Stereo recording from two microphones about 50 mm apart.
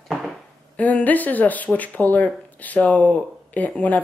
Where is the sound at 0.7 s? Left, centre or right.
Left.